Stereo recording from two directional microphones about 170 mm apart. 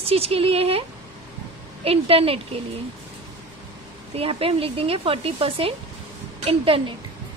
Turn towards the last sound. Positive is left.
turn(degrees=-35)  # may be behind; listen again after turning